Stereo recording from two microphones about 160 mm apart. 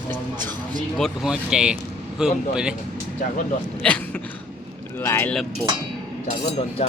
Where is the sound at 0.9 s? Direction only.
Centre (ahead or behind).